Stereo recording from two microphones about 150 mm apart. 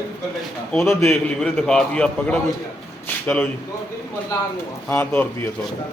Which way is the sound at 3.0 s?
10° left (ahead or behind).